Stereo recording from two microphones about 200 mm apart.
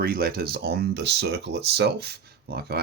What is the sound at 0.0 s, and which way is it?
Speech, 50° right (ahead or behind).